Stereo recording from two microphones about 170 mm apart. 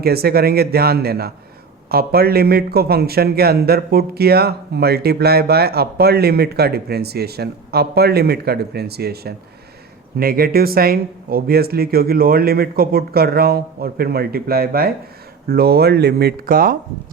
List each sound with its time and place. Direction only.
0.0 s a man's voice: 65° right (ahead or behind)